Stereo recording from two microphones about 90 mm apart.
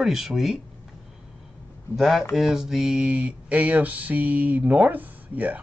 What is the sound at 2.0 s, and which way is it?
Speech, centre (ahead or behind).